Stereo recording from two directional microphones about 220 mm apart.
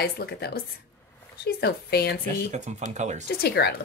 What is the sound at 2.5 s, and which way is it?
Speech, 30° right (ahead or behind).